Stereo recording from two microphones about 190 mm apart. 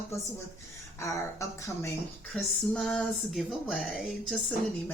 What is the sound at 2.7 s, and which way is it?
Music, 5° left (ahead or behind).